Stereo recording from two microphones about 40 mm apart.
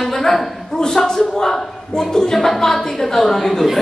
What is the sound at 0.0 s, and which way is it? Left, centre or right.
A man's voice, centre.